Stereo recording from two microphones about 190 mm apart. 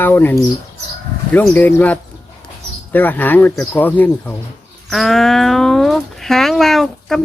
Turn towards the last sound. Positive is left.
turn(degrees=0)  # may be behind; listen again after turning